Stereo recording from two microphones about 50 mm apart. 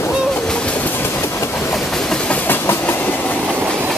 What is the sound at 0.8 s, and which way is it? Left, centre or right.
Train, left.